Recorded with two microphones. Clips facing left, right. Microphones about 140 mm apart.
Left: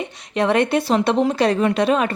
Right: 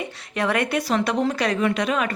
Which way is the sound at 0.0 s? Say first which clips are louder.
Left 4 dB; 25° left (ahead or behind).